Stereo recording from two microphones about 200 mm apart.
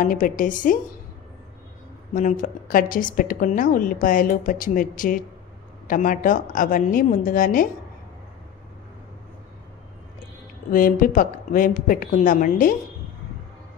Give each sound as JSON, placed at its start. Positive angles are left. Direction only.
{"t": 0.0, "sound": "a woman's voice", "side_deg": 45}
{"t": 2.1, "sound": "a woman's voice", "side_deg": 40}
{"t": 10.7, "sound": "a woman's voice", "side_deg": 45}